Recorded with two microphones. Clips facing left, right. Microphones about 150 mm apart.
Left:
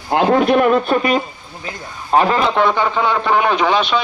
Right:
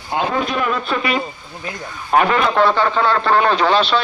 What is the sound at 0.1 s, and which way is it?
A man's voice, 65° left (ahead or behind).